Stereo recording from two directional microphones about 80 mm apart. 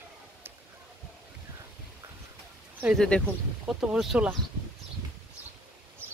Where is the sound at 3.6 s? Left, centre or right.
Centre.